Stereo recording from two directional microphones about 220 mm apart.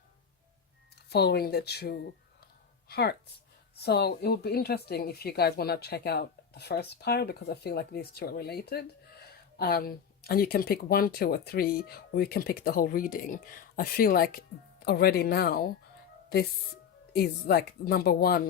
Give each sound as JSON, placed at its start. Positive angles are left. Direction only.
{"t": 1.1, "sound": "speech", "side_deg": 45}
{"t": 17.2, "sound": "speech", "side_deg": 45}